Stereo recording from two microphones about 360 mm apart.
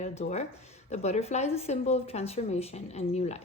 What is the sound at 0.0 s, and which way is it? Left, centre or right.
A woman's voice, centre.